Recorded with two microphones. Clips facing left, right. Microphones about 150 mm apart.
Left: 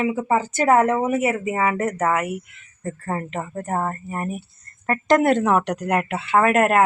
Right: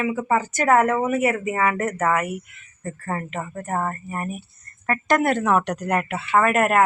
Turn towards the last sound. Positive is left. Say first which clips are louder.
# left 1 dB
turn(degrees=30)  # may be behind; listen again after turning